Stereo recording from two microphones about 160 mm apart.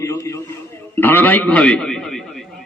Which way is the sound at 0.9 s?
10° left (ahead or behind).